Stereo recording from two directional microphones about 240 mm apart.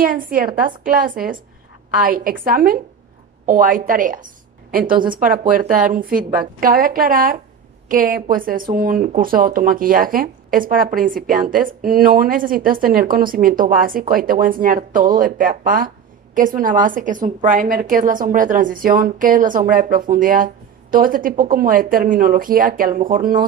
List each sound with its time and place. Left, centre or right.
0.0 s a woman's voice: right